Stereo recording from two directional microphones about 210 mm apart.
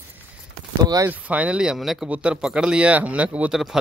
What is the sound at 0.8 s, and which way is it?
Speech, 15° right (ahead or behind).